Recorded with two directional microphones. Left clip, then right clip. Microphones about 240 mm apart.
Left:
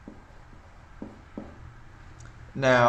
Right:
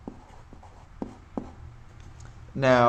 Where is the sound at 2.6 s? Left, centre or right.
Right.